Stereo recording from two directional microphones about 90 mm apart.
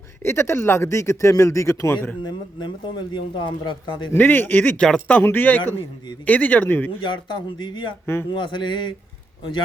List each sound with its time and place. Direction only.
0.2 s speech: 30° left (ahead or behind)
2.2 s speech: 60° left (ahead or behind)
4.1 s speech: 20° left (ahead or behind)
7.0 s speech: 65° left (ahead or behind)
8.0 s speech: 25° left (ahead or behind)
8.3 s a man's voice: 60° left (ahead or behind)